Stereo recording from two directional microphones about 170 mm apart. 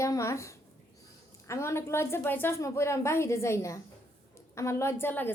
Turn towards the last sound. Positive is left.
turn(degrees=10)  # may be behind; listen again after turning